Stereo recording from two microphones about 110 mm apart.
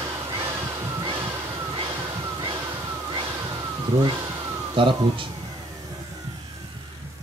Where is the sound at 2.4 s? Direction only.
45° right (ahead or behind).